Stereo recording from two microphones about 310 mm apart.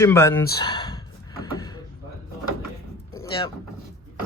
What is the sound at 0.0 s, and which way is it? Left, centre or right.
Speech, centre.